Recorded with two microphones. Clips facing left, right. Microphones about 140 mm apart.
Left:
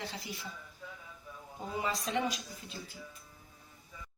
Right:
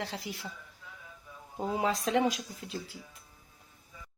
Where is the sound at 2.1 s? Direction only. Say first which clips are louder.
Right 6 dB; 90° right.